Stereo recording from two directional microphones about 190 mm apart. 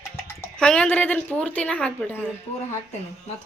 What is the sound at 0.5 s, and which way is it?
A woman's voice, 5° left (ahead or behind).